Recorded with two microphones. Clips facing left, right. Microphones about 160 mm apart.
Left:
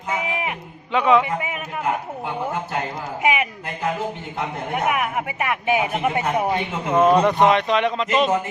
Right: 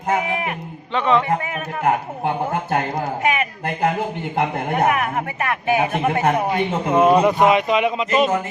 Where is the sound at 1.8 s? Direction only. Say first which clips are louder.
Right 5 dB; 55° right (ahead or behind).